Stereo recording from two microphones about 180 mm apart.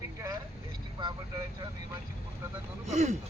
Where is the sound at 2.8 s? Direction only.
40° right (ahead or behind).